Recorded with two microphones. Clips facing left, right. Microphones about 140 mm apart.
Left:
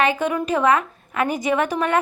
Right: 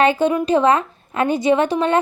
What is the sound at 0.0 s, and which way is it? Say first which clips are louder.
A woman's voice: right 5 dB; 30° right (ahead or behind).